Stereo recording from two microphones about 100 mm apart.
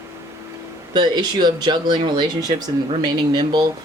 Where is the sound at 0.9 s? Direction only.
45° right (ahead or behind).